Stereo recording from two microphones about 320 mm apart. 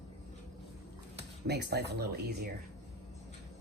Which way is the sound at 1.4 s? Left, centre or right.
Right.